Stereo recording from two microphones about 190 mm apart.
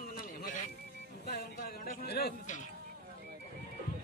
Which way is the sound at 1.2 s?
60° left (ahead or behind).